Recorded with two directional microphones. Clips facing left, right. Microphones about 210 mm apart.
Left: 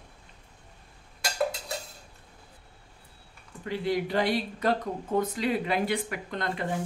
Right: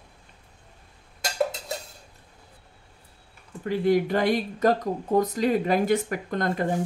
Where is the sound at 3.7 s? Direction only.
50° right (ahead or behind).